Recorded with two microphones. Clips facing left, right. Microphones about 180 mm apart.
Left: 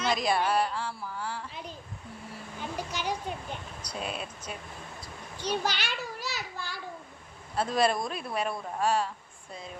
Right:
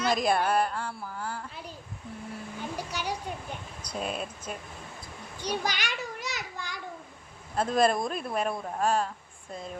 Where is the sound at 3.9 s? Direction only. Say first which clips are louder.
Right 3 dB; centre (ahead or behind).